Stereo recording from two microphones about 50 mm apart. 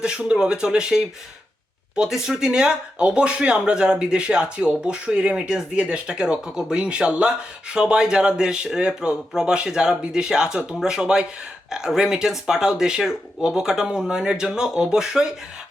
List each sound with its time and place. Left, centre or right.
0.0 s speech: centre